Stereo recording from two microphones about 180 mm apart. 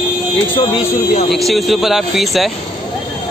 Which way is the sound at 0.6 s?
30° left (ahead or behind).